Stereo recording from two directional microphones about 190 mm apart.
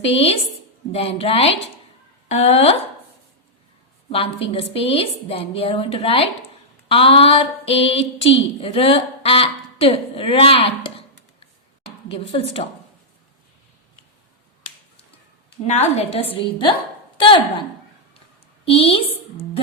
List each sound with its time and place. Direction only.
0.0 s a woman's voice: 30° left (ahead or behind)
4.1 s a woman's voice: 30° left (ahead or behind)
6.8 s a sound: 30° left (ahead or behind)
12.0 s a woman's voice: 30° left (ahead or behind)
15.6 s a woman's voice: 35° left (ahead or behind)
16.3 s a woman's voice: 25° left (ahead or behind)
18.6 s a woman's voice: 30° left (ahead or behind)